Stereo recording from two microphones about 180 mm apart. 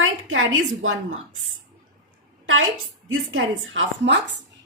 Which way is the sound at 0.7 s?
90° right.